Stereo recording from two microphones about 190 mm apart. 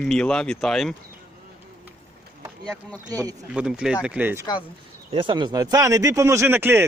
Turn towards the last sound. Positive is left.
turn(degrees=-10)  # may be behind; listen again after turning